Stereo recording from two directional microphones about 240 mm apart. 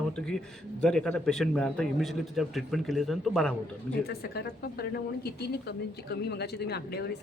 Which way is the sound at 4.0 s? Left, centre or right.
Left.